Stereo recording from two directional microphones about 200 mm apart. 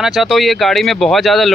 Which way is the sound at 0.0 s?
Centre (ahead or behind).